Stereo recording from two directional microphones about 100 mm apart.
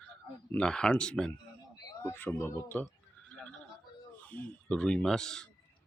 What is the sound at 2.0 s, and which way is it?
Speech, 20° left (ahead or behind).